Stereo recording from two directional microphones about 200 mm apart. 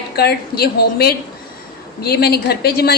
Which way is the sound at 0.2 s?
50° left (ahead or behind).